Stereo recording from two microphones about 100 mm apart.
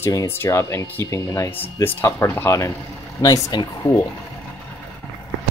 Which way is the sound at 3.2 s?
40° left (ahead or behind).